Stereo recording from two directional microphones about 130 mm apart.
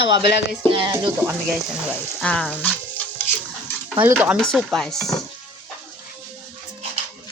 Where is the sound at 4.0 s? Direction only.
15° right (ahead or behind).